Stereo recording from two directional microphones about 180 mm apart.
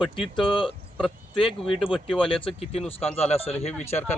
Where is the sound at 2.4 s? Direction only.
35° left (ahead or behind).